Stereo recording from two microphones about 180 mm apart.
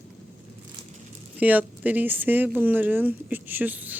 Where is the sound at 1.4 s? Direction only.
10° right (ahead or behind).